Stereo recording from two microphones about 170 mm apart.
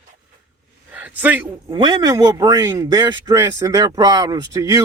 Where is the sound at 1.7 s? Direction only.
25° right (ahead or behind).